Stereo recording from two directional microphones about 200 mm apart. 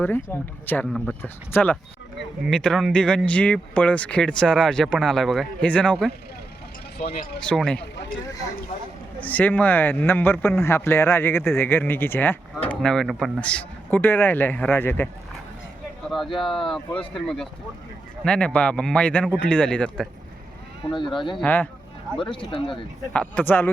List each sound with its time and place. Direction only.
0.3 s speech: 10° left (ahead or behind)
7.3 s speech: 5° left (ahead or behind)
9.2 s speech: 10° left (ahead or behind)
16.5 s speech: 25° left (ahead or behind)
17.2 s speech: centre (ahead or behind)
20.9 s speech: 25° left (ahead or behind)
21.4 s speech: 10° left (ahead or behind)
22.2 s speech: 25° left (ahead or behind)
22.7 s speech: 5° left (ahead or behind)